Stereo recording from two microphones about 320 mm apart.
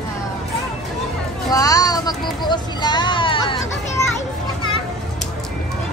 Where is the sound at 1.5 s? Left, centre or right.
Centre.